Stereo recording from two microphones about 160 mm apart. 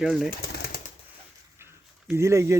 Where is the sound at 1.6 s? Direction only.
15° right (ahead or behind).